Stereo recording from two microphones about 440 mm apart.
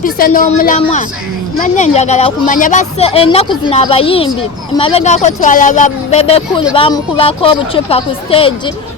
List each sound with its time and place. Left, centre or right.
0.0 s speech: centre